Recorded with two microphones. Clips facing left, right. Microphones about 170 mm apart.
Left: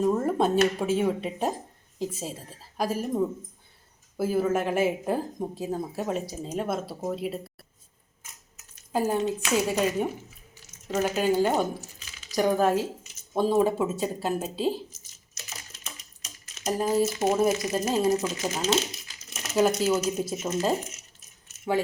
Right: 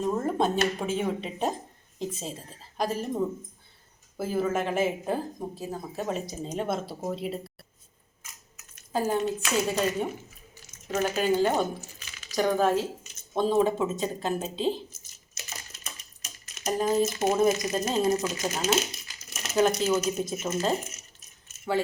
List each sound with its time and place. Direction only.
0.0 s speech: 5° left (ahead or behind)
4.2 s speech: 10° left (ahead or behind)
8.9 s speech: 10° left (ahead or behind)
16.6 s speech: 5° left (ahead or behind)
18.6 s a sound: 5° right (ahead or behind)
20.0 s speech: 15° left (ahead or behind)